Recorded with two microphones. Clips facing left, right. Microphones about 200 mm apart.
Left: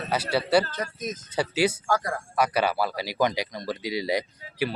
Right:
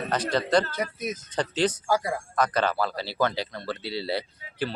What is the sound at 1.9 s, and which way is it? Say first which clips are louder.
Speech: right 1 dB; 10° right (ahead or behind).